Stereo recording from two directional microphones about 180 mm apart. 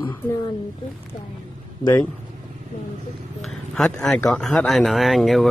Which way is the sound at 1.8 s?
15° left (ahead or behind).